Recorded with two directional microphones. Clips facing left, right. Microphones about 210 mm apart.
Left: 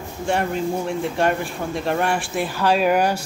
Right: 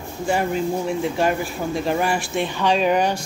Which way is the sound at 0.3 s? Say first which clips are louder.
Right 1 dB; centre (ahead or behind).